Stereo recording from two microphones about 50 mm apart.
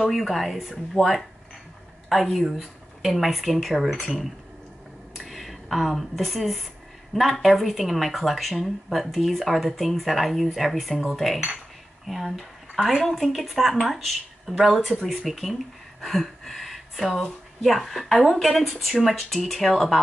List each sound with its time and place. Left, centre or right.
0.0 s speech: centre
1.0 s speech: centre
2.1 s speech: centre
2.4 s speech: centre
5.1 s speech: centre